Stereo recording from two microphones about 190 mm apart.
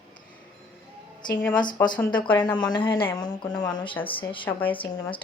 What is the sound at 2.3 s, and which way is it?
Speech, 25° left (ahead or behind).